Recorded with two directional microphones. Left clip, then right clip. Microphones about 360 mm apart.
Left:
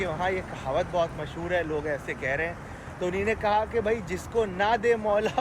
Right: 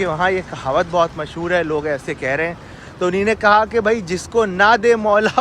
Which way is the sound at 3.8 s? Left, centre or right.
Right.